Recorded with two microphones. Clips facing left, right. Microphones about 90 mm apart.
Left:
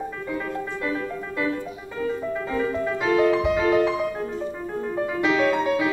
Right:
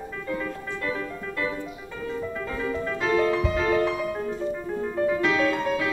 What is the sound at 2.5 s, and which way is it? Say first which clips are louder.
Music: left 4 dB; 10° left (ahead or behind).